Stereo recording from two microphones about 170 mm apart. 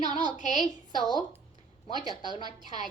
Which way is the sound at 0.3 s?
50° left (ahead or behind).